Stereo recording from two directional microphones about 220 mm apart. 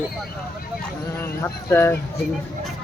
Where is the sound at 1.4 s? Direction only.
10° left (ahead or behind).